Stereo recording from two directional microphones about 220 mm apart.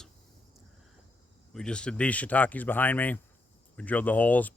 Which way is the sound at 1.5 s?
5° left (ahead or behind).